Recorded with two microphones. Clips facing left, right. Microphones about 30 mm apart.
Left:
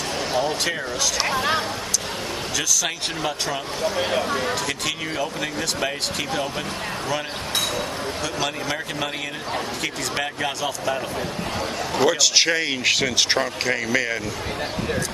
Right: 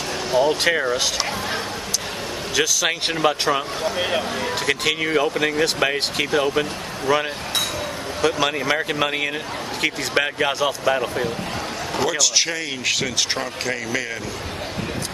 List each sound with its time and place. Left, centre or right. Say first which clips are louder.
0.4 s speech: right 7 dB; right
2.5 s speech: right 5 dB; right
12.0 s speech: left 2 dB; centre